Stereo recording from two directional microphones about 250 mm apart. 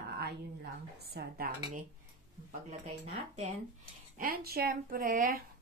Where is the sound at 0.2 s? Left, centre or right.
Right.